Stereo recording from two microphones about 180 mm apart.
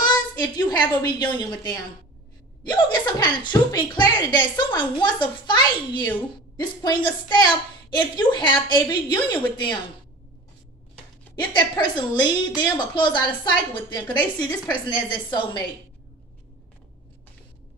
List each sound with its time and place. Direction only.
0.0 s a woman's voice: 25° left (ahead or behind)
11.3 s a woman's voice: 25° left (ahead or behind)